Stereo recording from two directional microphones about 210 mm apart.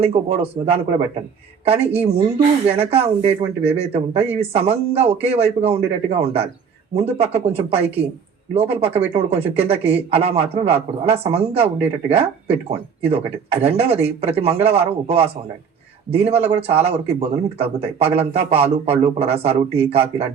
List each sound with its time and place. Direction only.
0.0 s speech: 30° right (ahead or behind)